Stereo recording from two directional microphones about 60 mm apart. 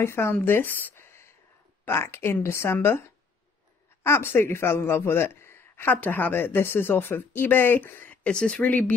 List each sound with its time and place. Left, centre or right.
0.0 s speech: left
0.9 s a sound: left
1.9 s speech: left
4.0 s a man's voice: left
5.9 s speech: left